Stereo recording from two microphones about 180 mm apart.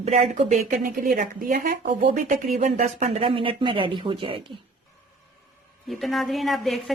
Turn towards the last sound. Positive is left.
turn(degrees=0)  # may be behind; listen again after turning